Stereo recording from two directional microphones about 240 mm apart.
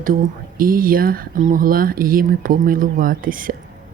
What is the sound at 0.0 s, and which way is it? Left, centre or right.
Speech, right.